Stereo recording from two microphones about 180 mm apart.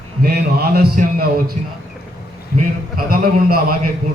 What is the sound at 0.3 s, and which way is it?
A man's voice, 60° right (ahead or behind).